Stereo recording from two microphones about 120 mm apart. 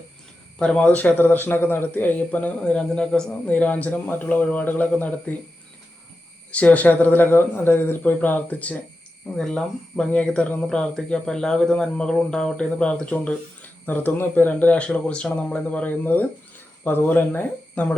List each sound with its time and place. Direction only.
0.6 s speech: 10° left (ahead or behind)
6.5 s speech: 10° left (ahead or behind)